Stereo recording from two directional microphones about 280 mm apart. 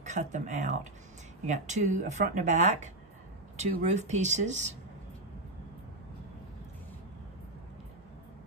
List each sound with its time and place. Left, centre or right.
0.0 s speech: right